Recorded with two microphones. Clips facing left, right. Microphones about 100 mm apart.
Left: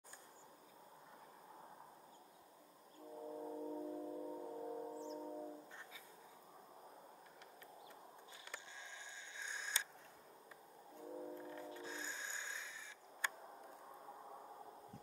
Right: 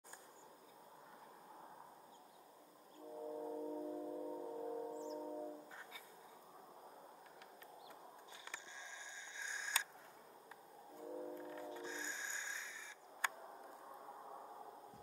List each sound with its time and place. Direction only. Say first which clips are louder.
3.2 s gong: right 2 dB; 5° right (ahead or behind)
11.0 s train: right 1 dB; 5° right (ahead or behind)
11.7 s music: right 1 dB; 20° right (ahead or behind)
14.0 s a sound: right 1 dB; 10° right (ahead or behind)